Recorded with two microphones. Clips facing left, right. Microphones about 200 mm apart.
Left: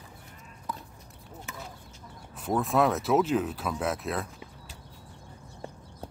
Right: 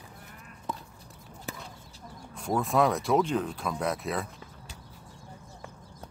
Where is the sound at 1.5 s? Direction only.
35° right (ahead or behind).